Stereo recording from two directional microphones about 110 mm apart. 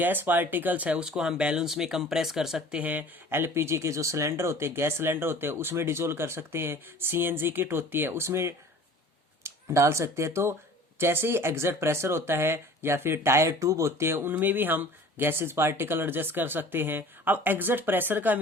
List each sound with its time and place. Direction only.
0.0 s speech: 15° right (ahead or behind)
2.8 s speech: 15° right (ahead or behind)